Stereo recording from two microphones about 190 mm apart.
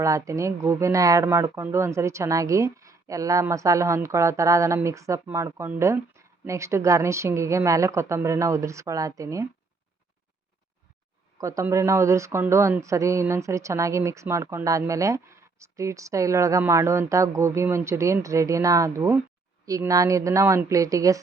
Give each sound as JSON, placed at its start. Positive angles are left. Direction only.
{"t": 0.0, "sound": "speech", "side_deg": -15}
{"t": 11.3, "sound": "speech", "side_deg": -15}